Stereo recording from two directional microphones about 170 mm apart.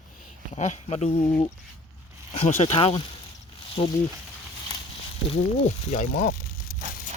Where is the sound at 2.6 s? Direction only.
35° left (ahead or behind).